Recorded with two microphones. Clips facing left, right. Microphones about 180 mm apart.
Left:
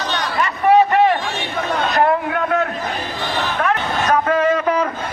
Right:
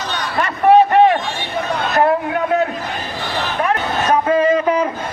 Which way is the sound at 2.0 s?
25° right (ahead or behind).